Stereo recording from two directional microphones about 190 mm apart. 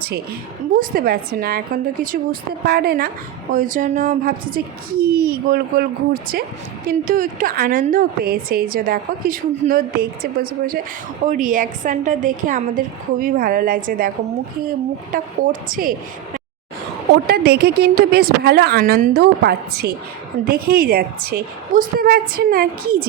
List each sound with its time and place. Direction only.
0.8 s a woman's voice: 50° right (ahead or behind)
6.8 s a woman's voice: 45° right (ahead or behind)
15.1 s a woman's voice: 45° right (ahead or behind)
17.2 s a woman's voice: 55° right (ahead or behind)